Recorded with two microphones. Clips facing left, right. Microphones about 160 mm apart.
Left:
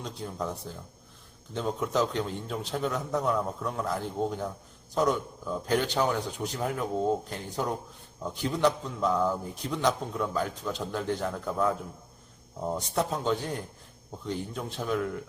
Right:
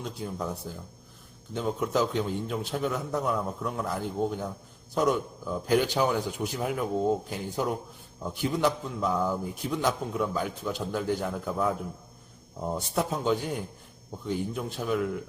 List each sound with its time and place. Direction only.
0.0 s a man's voice: 5° right (ahead or behind)